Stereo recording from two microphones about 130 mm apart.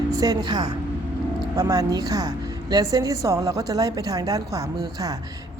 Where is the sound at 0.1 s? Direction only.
30° right (ahead or behind).